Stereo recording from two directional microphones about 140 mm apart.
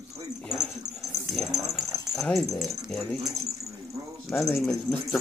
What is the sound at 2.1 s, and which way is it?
Speech, centre (ahead or behind).